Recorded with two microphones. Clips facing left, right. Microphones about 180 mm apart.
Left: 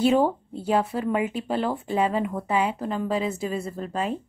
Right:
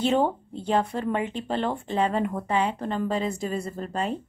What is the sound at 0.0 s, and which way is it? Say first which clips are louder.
Speech: left 3 dB; 5° left (ahead or behind).